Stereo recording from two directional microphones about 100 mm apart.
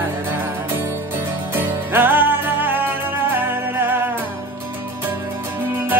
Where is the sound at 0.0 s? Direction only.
25° right (ahead or behind).